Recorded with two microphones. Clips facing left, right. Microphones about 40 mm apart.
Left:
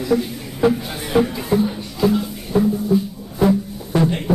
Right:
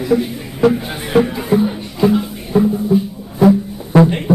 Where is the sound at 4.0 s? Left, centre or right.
Centre.